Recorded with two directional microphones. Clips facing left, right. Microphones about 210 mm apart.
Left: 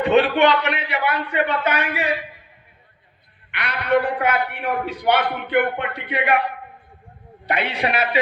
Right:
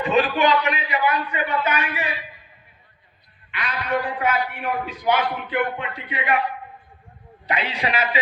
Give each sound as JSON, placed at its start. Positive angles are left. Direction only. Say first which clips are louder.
{"t": 0.0, "sound": "a man's voice", "louder": "left 4 dB", "side_deg": 70}
{"t": 3.5, "sound": "a man's voice", "louder": "left 5 dB", "side_deg": 70}